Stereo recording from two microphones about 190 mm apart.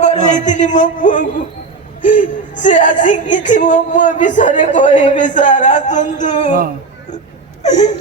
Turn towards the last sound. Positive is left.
turn(degrees=35)  # may be behind; listen again after turning